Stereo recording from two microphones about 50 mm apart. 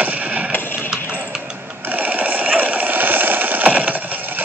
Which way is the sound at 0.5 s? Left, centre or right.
Left.